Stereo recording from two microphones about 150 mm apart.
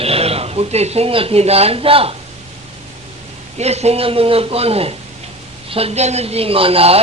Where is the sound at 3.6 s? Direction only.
45° right (ahead or behind).